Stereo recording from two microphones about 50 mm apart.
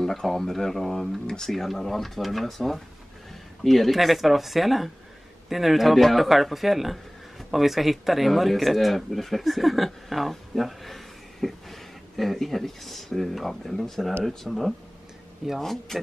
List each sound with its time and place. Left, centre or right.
0.0 s speech: centre
1.5 s speech: centre